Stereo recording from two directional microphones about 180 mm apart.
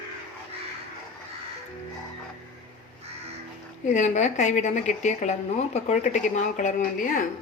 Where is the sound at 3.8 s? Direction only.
45° left (ahead or behind).